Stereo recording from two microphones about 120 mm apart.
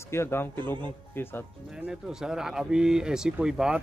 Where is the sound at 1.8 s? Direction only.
5° right (ahead or behind).